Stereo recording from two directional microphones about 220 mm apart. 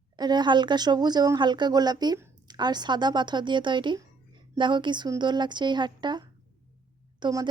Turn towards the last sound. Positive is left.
turn(degrees=-20)  # may be behind; listen again after turning